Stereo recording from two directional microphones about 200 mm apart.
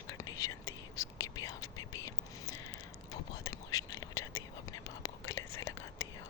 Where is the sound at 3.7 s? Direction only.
20° left (ahead or behind).